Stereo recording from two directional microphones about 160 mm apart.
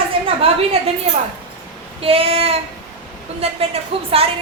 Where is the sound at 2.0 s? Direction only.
35° right (ahead or behind).